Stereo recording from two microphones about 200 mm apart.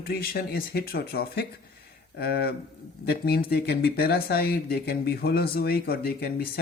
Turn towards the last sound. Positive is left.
turn(degrees=50)  # may be behind; listen again after turning